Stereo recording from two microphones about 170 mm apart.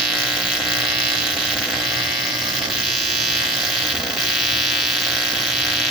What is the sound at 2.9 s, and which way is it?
Electric shaver, centre (ahead or behind).